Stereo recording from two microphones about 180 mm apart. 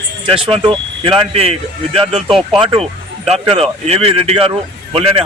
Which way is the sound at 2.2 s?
Centre (ahead or behind).